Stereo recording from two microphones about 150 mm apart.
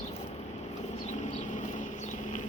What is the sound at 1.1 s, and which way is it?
Vehicle, 50° left (ahead or behind).